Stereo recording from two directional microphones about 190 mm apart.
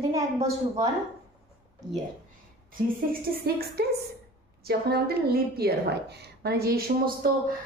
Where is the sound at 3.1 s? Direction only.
55° right (ahead or behind).